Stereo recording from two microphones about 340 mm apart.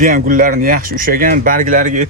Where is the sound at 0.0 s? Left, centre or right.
Right.